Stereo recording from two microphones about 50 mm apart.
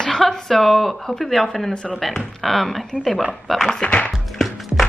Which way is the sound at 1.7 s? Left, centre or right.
Centre.